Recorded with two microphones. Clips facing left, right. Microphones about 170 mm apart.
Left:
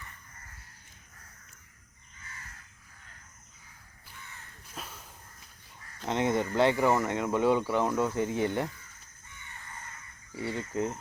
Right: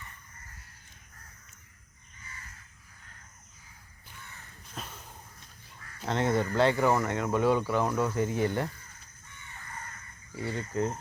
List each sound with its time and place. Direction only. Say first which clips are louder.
4.7 s a sound: right 1 dB; 5° left (ahead or behind)
6.1 s speech: even; 15° left (ahead or behind)
10.3 s speech: even; 20° left (ahead or behind)